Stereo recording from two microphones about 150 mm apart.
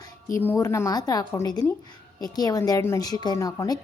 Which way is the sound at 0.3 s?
15° left (ahead or behind).